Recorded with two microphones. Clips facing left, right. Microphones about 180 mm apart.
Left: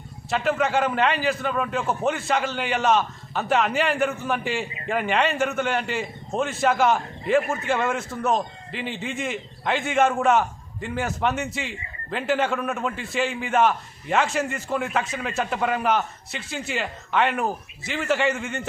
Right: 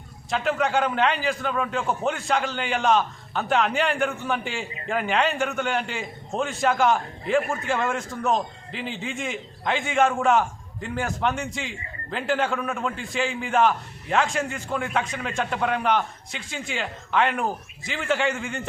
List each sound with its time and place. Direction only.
0.3 s a man's voice: centre (ahead or behind)